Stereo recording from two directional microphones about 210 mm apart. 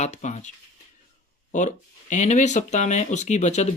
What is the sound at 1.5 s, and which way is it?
Speech, 35° left (ahead or behind).